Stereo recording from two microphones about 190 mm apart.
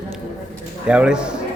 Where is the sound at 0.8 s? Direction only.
5° right (ahead or behind).